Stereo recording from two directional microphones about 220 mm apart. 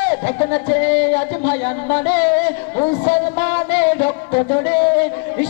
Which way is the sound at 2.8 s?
15° left (ahead or behind).